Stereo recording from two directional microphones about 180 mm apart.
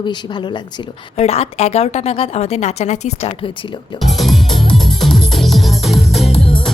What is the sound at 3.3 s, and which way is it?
Speech, 30° left (ahead or behind).